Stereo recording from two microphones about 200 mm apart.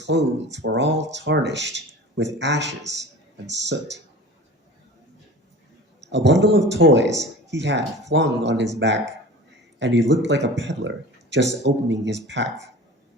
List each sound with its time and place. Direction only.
0.0 s speech: 60° right (ahead or behind)
6.1 s speech: 65° right (ahead or behind)